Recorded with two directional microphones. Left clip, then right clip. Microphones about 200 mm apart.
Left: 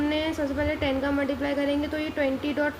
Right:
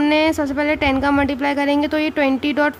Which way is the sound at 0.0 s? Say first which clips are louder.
Right 10 dB; 55° right (ahead or behind).